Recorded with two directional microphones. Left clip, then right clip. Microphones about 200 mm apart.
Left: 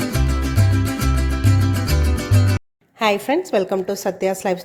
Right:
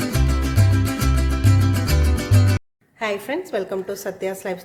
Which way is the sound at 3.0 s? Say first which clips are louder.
Left 6 dB; 35° left (ahead or behind).